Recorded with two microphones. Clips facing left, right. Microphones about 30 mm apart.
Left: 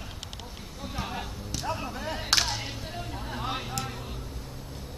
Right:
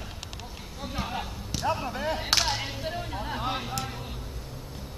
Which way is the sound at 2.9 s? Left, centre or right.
Centre.